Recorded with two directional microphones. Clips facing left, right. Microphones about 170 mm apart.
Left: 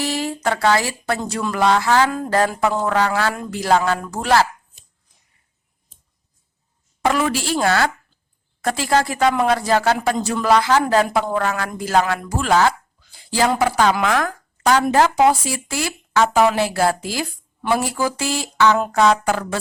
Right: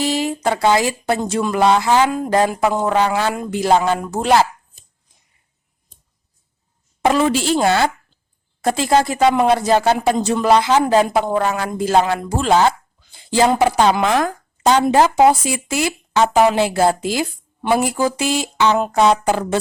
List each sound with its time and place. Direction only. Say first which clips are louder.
0.0 s speech: right 3 dB; 20° right (ahead or behind)
7.0 s speech: right 4 dB; 25° right (ahead or behind)